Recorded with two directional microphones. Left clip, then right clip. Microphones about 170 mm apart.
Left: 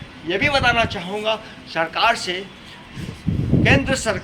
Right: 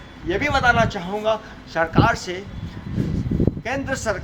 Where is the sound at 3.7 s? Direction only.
5° right (ahead or behind).